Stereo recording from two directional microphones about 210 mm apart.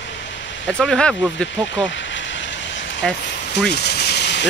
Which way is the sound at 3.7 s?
50° left (ahead or behind).